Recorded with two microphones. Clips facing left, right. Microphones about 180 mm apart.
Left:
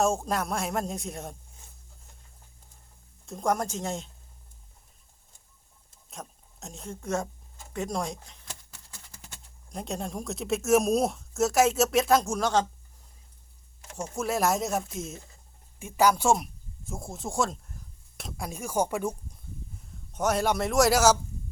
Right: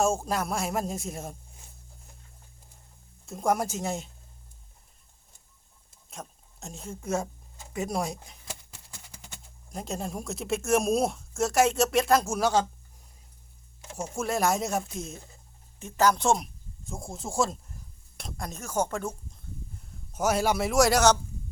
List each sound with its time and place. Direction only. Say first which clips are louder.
0.0 s speech: even; centre (ahead or behind)
3.2 s speech: right 1 dB; 5° right (ahead or behind)
6.1 s speech: even; centre (ahead or behind)
9.6 s speech: even; centre (ahead or behind)
13.9 s speech: even; 10° right (ahead or behind); by 19.4 s 10° left (ahead or behind)
20.1 s speech: even; 5° right (ahead or behind)